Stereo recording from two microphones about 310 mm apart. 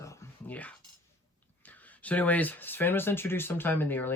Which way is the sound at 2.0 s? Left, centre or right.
Centre.